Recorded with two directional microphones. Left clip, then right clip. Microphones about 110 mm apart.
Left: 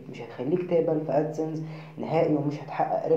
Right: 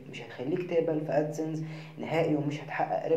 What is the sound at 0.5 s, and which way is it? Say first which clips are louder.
Speech: left 4 dB; 10° right (ahead or behind).